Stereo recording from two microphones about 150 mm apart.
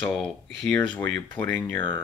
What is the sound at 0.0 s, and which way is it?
Speech, 5° left (ahead or behind).